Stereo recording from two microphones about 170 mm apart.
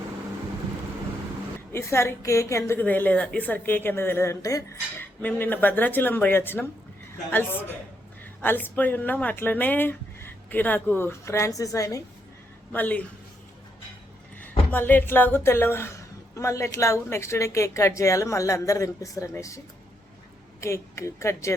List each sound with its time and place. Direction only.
1.7 s a woman's voice: 15° left (ahead or behind)
14.7 s a woman's voice: 10° left (ahead or behind)
20.6 s a woman's voice: 15° left (ahead or behind)